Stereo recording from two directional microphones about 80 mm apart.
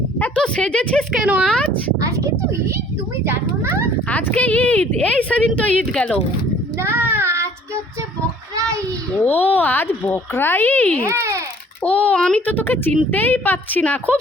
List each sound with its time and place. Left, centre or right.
0.2 s speech: centre
1.2 s speech: centre
1.5 s speech: centre
2.0 s a child's voice: right
4.1 s a woman's voice: centre
6.7 s child singing: right
9.2 s speech: left
11.0 s a child's voice: right
11.8 s a woman's voice: centre
12.5 s speech: left